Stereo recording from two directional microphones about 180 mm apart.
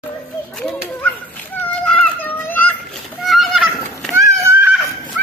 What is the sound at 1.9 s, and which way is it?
Children playing, 10° left (ahead or behind).